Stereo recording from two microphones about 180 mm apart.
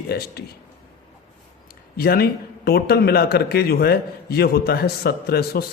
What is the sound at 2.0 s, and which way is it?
A man's voice, 60° left (ahead or behind).